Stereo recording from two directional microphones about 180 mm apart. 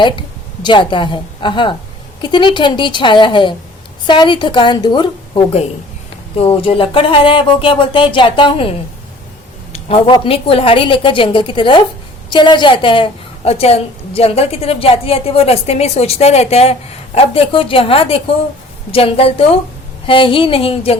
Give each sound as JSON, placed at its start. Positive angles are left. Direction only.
{"t": 0.0, "sound": "a woman's voice", "side_deg": 25}
{"t": 9.7, "sound": "a woman's voice", "side_deg": 30}